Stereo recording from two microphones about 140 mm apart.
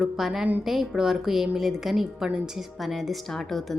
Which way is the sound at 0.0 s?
5° right (ahead or behind).